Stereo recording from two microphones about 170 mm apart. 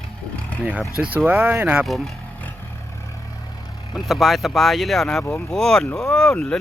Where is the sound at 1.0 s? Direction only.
10° right (ahead or behind).